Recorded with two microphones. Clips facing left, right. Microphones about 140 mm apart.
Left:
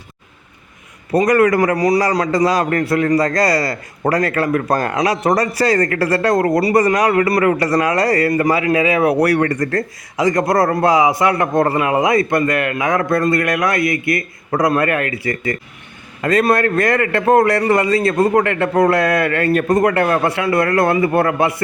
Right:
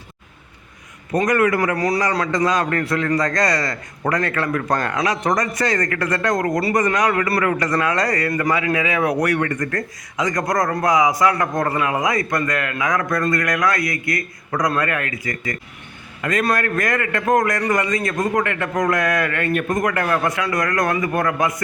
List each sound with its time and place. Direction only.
1.1 s a man's voice: 35° left (ahead or behind)
1.7 s a man's voice: 20° left (ahead or behind)
2.0 s a man's voice: 35° left (ahead or behind)